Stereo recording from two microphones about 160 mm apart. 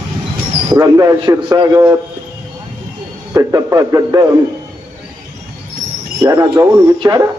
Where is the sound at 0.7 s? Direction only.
20° right (ahead or behind).